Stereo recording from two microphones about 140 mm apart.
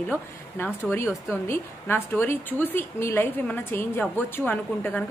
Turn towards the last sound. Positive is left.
turn(degrees=10)  # may be behind; listen again after turning